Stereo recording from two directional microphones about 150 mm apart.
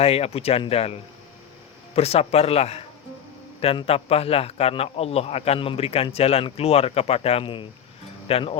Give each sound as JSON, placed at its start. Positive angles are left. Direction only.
{"t": 0.0, "sound": "speech", "side_deg": 40}
{"t": 2.0, "sound": "a man's voice", "side_deg": 40}